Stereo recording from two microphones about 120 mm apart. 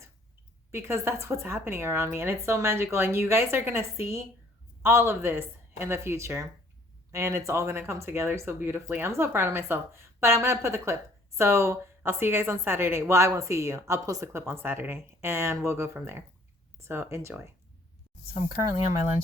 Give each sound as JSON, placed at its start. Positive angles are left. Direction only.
{"t": 0.7, "sound": "a woman's voice", "side_deg": -20}